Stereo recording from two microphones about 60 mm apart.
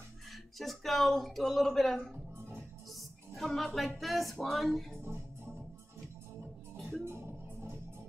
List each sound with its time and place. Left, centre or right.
0.6 s speech: centre
5.0 s music: right
6.8 s music: centre